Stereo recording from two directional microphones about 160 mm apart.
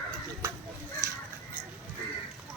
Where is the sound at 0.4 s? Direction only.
15° right (ahead or behind).